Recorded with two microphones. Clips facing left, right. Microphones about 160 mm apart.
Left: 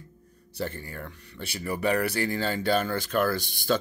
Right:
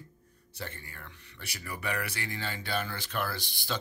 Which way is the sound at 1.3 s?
30° left (ahead or behind).